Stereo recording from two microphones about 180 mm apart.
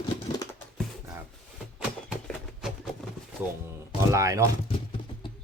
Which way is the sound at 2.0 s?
5° right (ahead or behind).